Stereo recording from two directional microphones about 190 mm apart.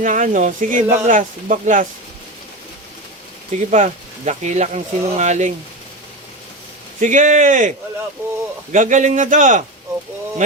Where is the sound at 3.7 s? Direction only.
40° right (ahead or behind).